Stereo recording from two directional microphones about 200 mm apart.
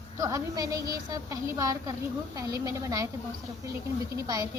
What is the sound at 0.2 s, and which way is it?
A woman's voice, 15° right (ahead or behind).